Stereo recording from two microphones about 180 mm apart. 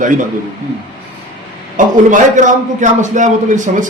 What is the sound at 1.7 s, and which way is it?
A man's voice, 45° right (ahead or behind).